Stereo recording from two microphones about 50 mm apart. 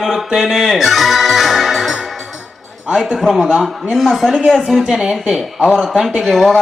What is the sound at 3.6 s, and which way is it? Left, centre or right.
A woman's voice, centre.